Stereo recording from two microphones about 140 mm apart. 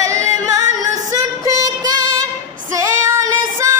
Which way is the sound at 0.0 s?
20° right (ahead or behind).